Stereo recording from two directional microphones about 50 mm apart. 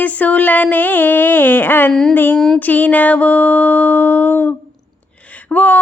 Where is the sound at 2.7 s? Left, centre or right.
Left.